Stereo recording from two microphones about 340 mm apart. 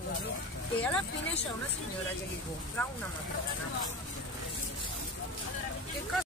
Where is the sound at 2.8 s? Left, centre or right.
Centre.